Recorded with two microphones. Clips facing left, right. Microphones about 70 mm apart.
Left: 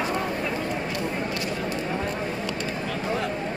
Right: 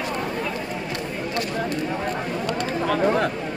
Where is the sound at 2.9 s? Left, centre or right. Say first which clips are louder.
Right 9 dB; right.